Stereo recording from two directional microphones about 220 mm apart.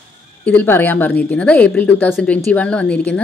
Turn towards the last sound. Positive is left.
turn(degrees=5)  # may be behind; listen again after turning